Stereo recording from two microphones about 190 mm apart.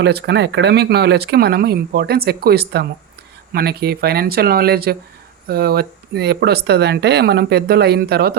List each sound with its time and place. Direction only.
0.0 s speech: 60° right (ahead or behind)